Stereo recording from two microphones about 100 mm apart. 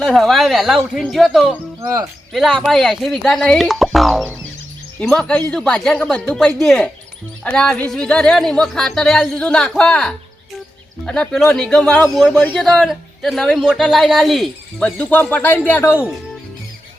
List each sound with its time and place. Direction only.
0.0 s speech: centre (ahead or behind)
1.8 s speech: 40° right (ahead or behind)
2.3 s speech: centre (ahead or behind)
4.9 s speech: 10° left (ahead or behind)
12.3 s speech: 15° left (ahead or behind)
12.5 s speech: 5° left (ahead or behind); by 16.0 s 25° left (ahead or behind)